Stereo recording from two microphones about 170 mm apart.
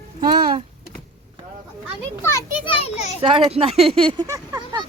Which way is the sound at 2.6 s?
40° left (ahead or behind).